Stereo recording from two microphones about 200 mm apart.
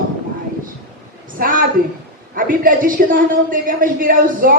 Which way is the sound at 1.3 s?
45° right (ahead or behind).